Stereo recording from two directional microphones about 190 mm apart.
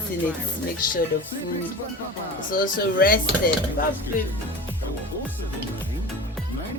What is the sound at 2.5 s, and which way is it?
Speech, 45° left (ahead or behind).